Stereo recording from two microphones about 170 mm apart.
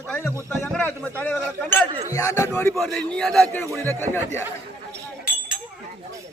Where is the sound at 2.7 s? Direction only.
5° left (ahead or behind).